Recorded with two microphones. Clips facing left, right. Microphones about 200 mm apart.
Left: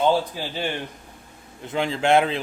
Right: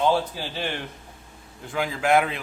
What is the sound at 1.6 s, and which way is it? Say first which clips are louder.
Speech: left 3 dB; 25° left (ahead or behind).